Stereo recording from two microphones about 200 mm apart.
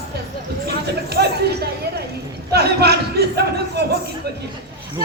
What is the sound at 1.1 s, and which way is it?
Chatter, 55° right (ahead or behind).